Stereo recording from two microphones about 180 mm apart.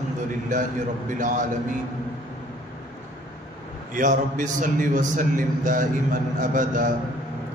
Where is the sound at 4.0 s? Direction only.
45° right (ahead or behind).